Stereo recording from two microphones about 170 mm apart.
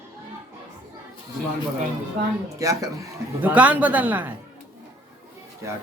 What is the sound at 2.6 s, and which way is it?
Speech, 20° right (ahead or behind).